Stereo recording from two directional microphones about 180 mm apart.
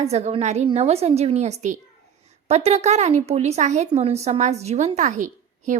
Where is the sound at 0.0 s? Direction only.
35° right (ahead or behind).